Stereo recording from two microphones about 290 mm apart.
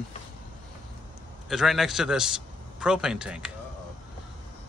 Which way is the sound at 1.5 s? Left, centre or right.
Centre.